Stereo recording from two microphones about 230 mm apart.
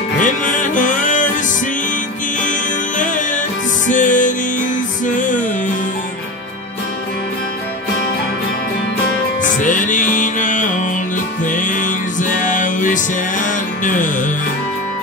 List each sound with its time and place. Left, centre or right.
0.2 s music: left
2.4 s music: left
9.6 s music: left